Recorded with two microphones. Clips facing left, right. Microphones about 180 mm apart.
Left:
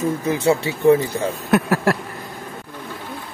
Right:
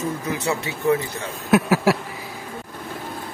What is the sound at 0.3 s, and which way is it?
Speech, 30° left (ahead or behind).